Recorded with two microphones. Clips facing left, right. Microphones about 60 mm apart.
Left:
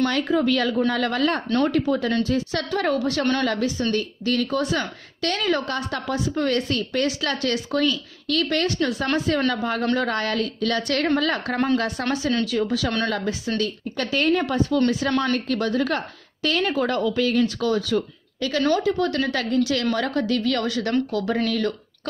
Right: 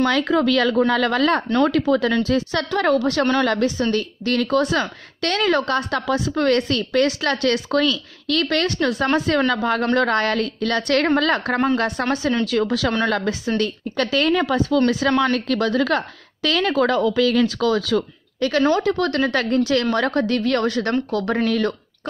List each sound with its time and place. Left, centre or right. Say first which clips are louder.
0.1 s speech: right 3 dB; right
2.5 s a woman's voice: right 4 dB; right
6.5 s a woman's voice: right 4 dB; right
7.2 s a woman's voice: right 4 dB; right
9.5 s speech: right 4 dB; right
9.9 s a woman's voice: right 5 dB; right
11.5 s a woman's voice: right 2 dB; right
12.1 s a woman's voice: even; right
12.4 s a woman's voice: right 3 dB; right
15.0 s speech: right 4 dB; right
15.3 s speech: right 3 dB; right
18.4 s a woman's voice: right 5 dB; right
18.8 s a woman's voice: right 2 dB; right
19.2 s a woman's voice: right 3 dB; right